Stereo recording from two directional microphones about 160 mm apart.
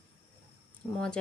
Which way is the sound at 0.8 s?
15° left (ahead or behind).